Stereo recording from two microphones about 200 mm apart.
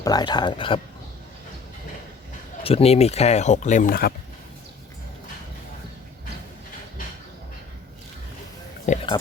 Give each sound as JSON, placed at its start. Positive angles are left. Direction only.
{"t": 0.0, "sound": "speech", "side_deg": 20}
{"t": 2.6, "sound": "speech", "side_deg": 30}
{"t": 8.9, "sound": "a sound", "side_deg": 40}